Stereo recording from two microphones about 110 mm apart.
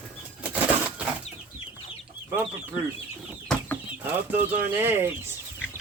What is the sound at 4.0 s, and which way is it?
Speech, 20° right (ahead or behind).